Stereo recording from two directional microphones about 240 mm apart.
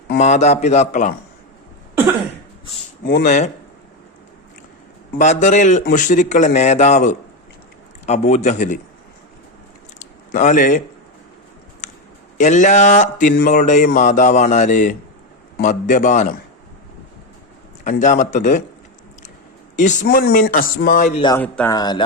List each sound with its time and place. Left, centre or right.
0.2 s a man's voice: left
3.0 s speech: left
5.1 s a man's voice: left
10.0 s a sound: left
12.4 s speech: left
18.0 s speech: left
19.7 s speech: left
21.2 s speech: centre
21.4 s speech: centre